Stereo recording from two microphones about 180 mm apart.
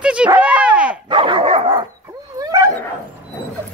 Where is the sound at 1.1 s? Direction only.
30° right (ahead or behind).